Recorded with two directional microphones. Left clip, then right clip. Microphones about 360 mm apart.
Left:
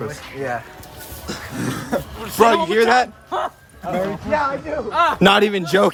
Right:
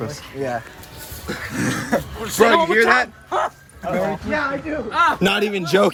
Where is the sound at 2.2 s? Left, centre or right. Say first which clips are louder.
Even; centre.